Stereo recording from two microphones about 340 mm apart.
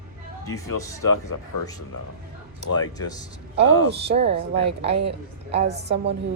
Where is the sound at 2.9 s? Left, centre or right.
Centre.